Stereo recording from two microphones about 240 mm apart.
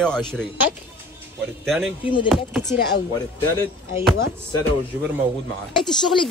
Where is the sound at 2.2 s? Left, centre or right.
Centre.